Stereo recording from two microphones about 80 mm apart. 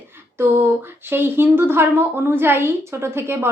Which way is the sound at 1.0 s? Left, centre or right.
Right.